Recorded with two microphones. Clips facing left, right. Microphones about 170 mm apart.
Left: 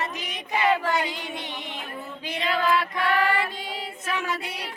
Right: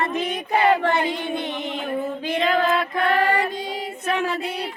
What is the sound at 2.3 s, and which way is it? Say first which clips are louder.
Female singing: right 6 dB; 50° right (ahead or behind).